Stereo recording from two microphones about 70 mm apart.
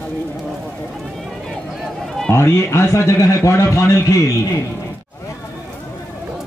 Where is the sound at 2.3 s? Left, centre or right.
Left.